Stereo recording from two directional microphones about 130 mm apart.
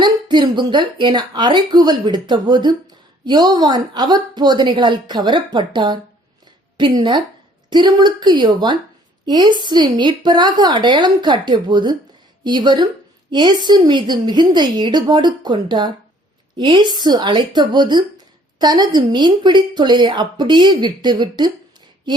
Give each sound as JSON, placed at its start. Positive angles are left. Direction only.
{"t": 0.0, "sound": "a woman's voice", "side_deg": -35}